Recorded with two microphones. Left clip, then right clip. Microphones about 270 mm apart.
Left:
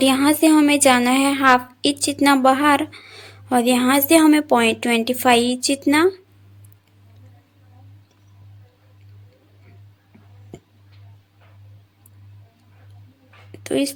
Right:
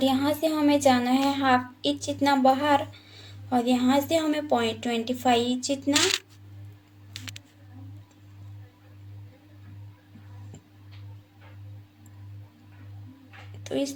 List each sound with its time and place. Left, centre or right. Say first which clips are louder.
0.0 s a woman's voice: left 8 dB; left
13.7 s speech: left 7 dB; left